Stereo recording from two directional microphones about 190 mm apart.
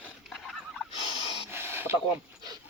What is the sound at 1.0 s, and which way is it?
Fowl, 30° left (ahead or behind).